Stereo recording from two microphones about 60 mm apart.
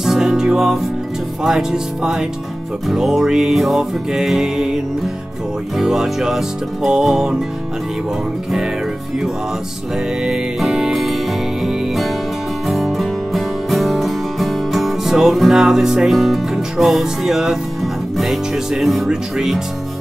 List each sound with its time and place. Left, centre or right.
0.0 s music: centre
5.8 s music: centre
10.6 s music: centre